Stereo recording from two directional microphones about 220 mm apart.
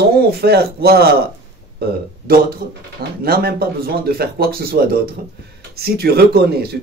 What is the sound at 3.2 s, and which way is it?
Speech, 45° right (ahead or behind).